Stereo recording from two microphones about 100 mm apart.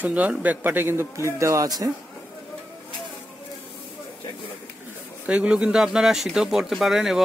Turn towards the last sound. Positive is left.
turn(degrees=-5)  # may be behind; listen again after turning